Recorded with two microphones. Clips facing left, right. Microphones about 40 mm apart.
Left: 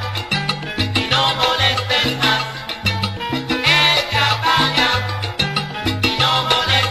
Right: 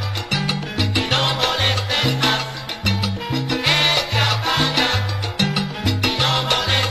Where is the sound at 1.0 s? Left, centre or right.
Centre.